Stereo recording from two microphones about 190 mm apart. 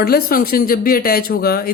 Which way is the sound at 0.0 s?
50° left (ahead or behind).